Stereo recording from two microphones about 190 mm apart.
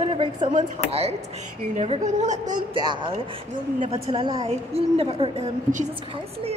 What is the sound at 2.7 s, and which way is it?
Speech, 25° right (ahead or behind).